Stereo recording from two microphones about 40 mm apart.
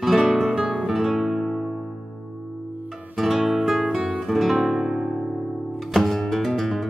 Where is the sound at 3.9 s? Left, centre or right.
Right.